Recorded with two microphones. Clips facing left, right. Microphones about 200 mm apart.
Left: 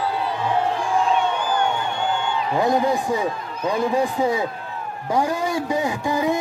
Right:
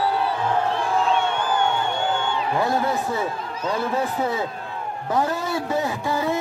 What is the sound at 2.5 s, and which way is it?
Speech, 15° left (ahead or behind).